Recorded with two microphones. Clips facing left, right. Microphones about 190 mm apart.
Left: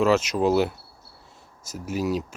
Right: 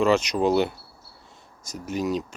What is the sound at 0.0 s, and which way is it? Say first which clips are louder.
Speech: even; 5° left (ahead or behind).